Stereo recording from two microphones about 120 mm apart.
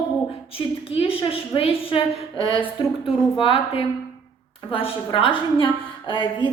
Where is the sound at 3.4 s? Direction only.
50° left (ahead or behind).